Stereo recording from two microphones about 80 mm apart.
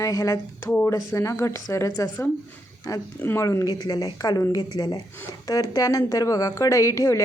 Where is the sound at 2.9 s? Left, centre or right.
Left.